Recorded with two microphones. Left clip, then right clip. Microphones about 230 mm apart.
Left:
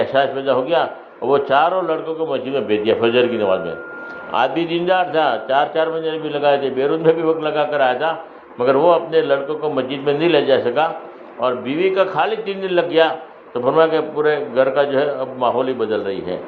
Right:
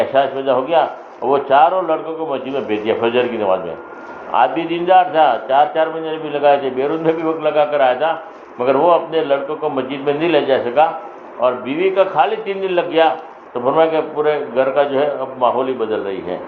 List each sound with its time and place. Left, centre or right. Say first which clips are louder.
0.1 s a man's voice: right 2 dB; left